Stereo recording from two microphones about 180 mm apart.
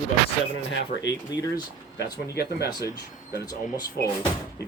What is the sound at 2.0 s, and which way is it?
Speech, 60° left (ahead or behind).